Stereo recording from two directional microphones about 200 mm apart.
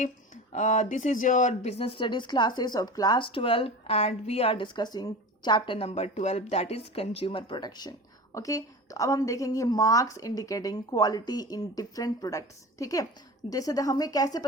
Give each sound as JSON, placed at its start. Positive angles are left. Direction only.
{"t": 0.5, "sound": "speech", "side_deg": 35}